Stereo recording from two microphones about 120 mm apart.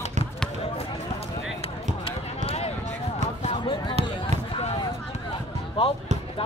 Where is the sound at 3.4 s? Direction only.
45° left (ahead or behind).